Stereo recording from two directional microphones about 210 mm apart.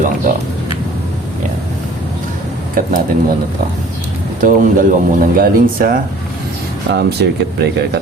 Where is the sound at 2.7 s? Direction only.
40° right (ahead or behind).